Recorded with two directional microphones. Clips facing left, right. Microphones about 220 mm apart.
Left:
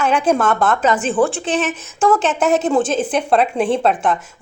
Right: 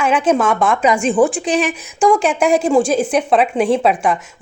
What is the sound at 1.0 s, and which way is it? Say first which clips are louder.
Speech: right 3 dB; centre (ahead or behind).